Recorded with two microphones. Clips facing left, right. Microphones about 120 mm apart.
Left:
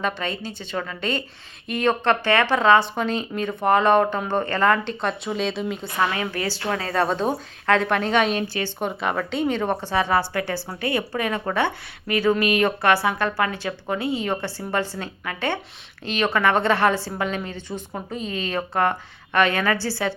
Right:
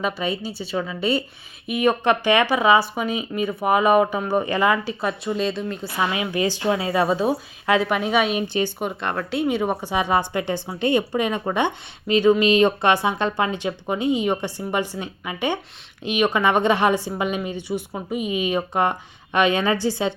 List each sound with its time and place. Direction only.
0.0 s a woman's voice: 10° right (ahead or behind)
6.0 s a woman's voice: 15° right (ahead or behind)